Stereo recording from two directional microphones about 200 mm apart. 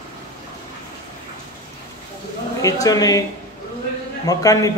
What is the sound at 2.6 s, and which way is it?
Speech, 15° left (ahead or behind).